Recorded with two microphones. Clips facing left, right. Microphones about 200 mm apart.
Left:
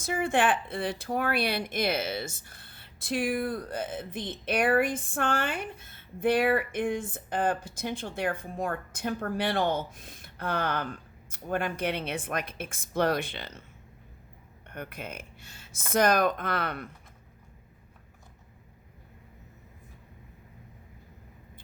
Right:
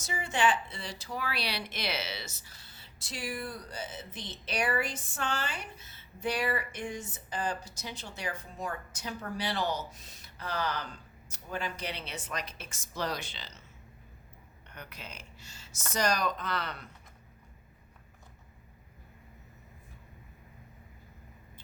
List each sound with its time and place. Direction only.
0.0 s speech: 55° left (ahead or behind)
14.7 s speech: 55° left (ahead or behind)